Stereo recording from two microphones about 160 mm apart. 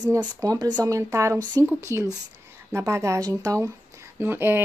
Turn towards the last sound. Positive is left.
turn(degrees=-15)  # may be behind; listen again after turning